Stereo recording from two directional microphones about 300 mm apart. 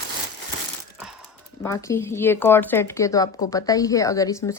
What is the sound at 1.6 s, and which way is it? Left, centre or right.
Speech, centre.